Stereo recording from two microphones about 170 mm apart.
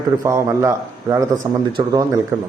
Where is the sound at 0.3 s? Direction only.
15° right (ahead or behind).